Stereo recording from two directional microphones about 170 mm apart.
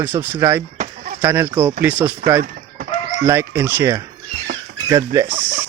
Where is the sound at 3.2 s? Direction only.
15° right (ahead or behind).